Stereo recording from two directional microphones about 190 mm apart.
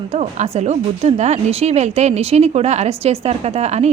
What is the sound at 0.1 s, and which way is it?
A woman's voice, 35° right (ahead or behind).